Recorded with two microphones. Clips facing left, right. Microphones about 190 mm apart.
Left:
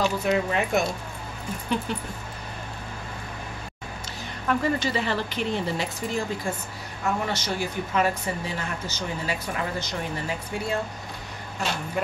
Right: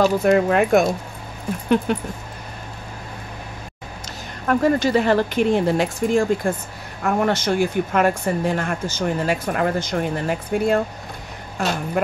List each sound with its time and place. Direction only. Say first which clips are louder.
0.0 s speech: right 8 dB; 50° right (ahead or behind)
4.5 s speech: right 7 dB; 45° right (ahead or behind)